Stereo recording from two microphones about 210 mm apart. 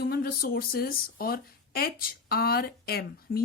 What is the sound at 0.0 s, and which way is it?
A woman's voice, 45° left (ahead or behind).